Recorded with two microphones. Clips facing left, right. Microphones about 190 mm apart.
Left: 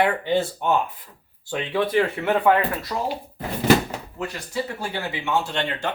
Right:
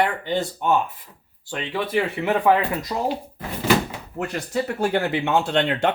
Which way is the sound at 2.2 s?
15° right (ahead or behind).